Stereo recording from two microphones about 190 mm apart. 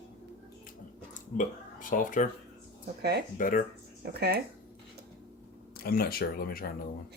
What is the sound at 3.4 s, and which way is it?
Speech, 45° left (ahead or behind).